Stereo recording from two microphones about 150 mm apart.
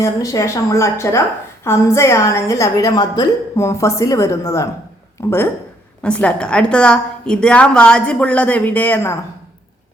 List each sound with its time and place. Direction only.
0.0 s a woman's voice: 20° left (ahead or behind)
6.0 s a woman's voice: 10° left (ahead or behind)